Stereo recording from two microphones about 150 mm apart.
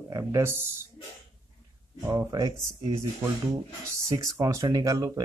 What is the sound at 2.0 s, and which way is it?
Speech, 20° right (ahead or behind).